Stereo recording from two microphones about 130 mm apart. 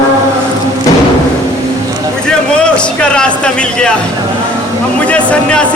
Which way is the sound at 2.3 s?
5° left (ahead or behind).